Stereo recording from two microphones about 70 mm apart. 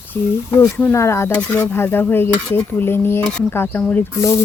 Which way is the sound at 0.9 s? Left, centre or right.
Left.